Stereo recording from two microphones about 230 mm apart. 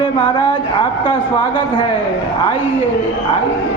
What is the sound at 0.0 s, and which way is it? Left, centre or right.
Speech, left.